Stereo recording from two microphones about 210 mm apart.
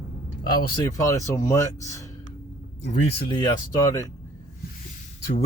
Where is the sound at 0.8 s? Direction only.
15° left (ahead or behind).